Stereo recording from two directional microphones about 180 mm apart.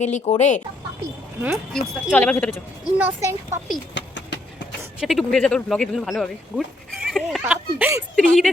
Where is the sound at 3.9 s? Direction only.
85° left.